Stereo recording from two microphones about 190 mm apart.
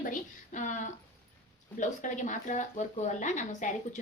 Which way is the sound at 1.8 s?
40° left (ahead or behind).